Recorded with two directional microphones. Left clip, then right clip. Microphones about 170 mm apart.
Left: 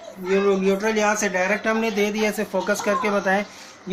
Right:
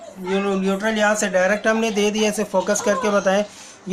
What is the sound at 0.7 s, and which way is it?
Speech, 20° right (ahead or behind).